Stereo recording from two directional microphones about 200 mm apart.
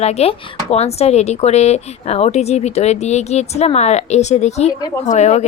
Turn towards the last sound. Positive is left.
turn(degrees=35)  # may be behind; listen again after turning